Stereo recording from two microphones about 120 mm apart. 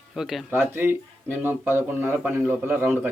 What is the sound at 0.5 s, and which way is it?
Speech, 20° right (ahead or behind).